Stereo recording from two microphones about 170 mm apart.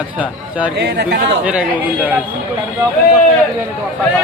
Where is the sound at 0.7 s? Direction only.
75° right (ahead or behind).